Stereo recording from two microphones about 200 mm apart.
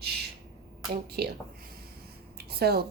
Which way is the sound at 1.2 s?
55° right (ahead or behind).